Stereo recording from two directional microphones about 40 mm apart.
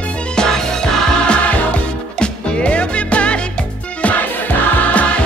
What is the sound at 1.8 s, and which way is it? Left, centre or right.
Music, left.